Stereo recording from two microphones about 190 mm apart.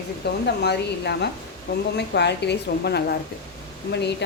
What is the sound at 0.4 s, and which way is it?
A woman's voice, 60° left (ahead or behind).